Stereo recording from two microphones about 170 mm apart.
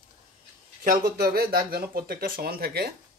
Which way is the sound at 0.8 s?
60° right (ahead or behind).